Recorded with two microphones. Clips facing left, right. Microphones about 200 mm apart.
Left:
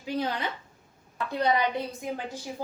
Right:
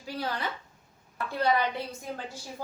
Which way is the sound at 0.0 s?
20° left (ahead or behind).